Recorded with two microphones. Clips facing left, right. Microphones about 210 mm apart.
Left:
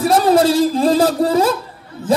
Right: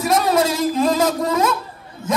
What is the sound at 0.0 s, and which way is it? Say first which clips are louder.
Speech: left 5 dB; 30° left (ahead or behind).